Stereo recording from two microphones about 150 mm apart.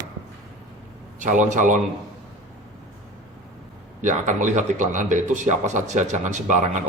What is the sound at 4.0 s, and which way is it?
Speech, 55° right (ahead or behind).